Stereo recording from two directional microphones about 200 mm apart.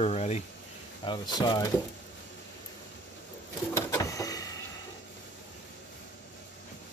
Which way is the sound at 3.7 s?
15° left (ahead or behind).